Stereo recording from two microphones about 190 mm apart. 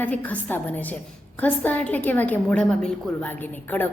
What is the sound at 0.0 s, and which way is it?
A woman's voice, 10° left (ahead or behind).